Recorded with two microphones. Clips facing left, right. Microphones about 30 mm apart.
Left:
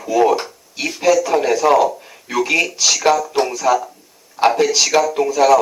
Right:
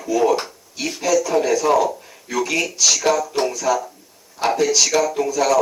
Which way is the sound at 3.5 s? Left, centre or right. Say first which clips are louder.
Left 4 dB; centre.